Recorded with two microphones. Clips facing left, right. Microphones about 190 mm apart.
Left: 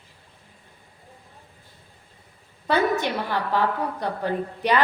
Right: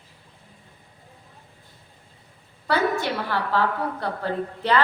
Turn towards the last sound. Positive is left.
turn(degrees=15)  # may be behind; listen again after turning